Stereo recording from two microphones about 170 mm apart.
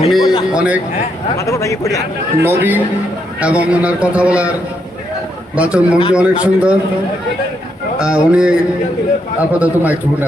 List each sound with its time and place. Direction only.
0.1 s a man's voice: centre (ahead or behind)
1.5 s speech: 15° left (ahead or behind)
2.4 s a man's voice: 10° right (ahead or behind)
5.5 s a man's voice: 5° right (ahead or behind)
7.9 s a man's voice: 5° right (ahead or behind)